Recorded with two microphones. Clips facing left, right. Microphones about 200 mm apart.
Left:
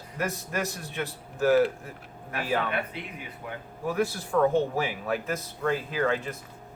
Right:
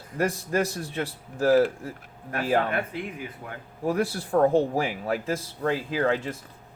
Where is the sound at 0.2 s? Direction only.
30° right (ahead or behind).